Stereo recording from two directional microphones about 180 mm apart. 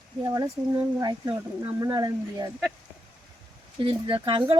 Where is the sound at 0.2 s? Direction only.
20° right (ahead or behind).